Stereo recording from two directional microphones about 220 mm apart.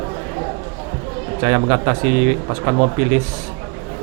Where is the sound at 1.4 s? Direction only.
20° right (ahead or behind).